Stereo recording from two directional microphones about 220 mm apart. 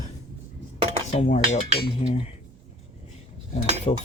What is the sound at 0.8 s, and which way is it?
Cutlery, 25° right (ahead or behind).